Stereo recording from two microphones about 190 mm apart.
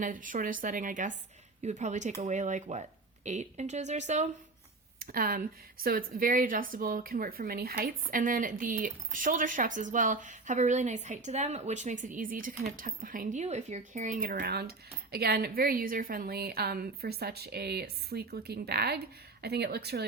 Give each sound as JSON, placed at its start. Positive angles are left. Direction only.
{"t": 0.0, "sound": "a woman's voice", "side_deg": -45}
{"t": 4.9, "sound": "a woman's voice", "side_deg": -50}